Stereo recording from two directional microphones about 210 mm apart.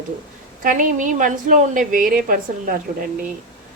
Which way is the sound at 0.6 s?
40° right (ahead or behind).